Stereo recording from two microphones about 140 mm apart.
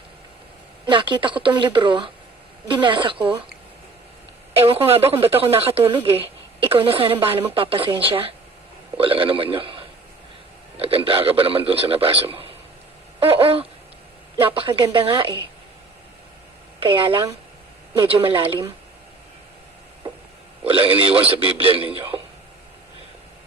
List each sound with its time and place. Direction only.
0.9 s a woman's voice: 35° right (ahead or behind)
4.5 s a woman's voice: 45° right (ahead or behind)
13.1 s a sound: 40° right (ahead or behind)
14.4 s a woman's voice: 40° right (ahead or behind)
16.8 s a woman's voice: 35° right (ahead or behind)
20.7 s a woman's voice: 40° right (ahead or behind)
22.1 s a sound: 40° right (ahead or behind)